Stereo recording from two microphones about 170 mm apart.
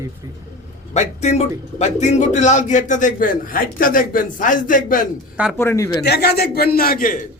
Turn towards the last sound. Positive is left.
turn(degrees=55)  # may be behind; listen again after turning